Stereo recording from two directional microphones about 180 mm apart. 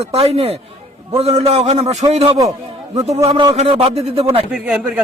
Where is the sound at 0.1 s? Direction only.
35° right (ahead or behind).